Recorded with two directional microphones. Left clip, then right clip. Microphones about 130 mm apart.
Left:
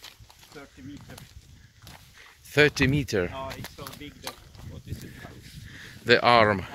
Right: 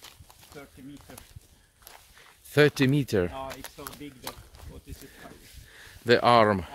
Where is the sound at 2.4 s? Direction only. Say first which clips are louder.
Left 1 dB; 55° right (ahead or behind).